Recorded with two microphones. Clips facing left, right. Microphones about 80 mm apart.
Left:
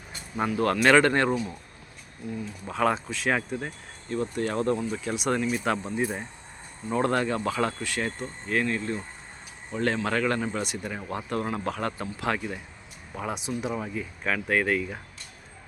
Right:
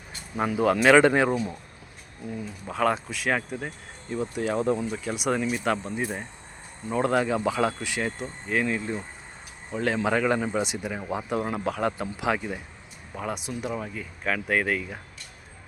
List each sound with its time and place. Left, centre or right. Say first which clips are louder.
0.3 s speech: right 2 dB; centre
2.6 s speech: even; centre